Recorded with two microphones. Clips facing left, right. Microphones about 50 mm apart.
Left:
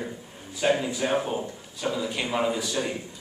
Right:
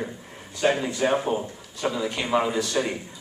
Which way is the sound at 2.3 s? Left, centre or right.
Centre.